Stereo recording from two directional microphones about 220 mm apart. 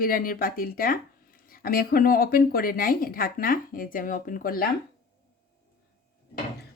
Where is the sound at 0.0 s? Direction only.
40° left (ahead or behind).